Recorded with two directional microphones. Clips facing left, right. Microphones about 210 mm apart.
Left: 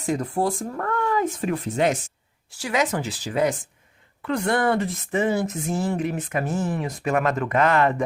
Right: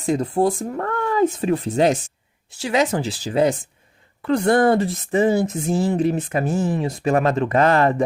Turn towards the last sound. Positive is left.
turn(degrees=-35)  # may be behind; listen again after turning